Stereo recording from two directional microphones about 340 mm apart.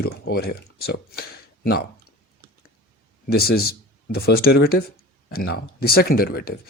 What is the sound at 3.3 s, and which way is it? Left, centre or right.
Speech, left.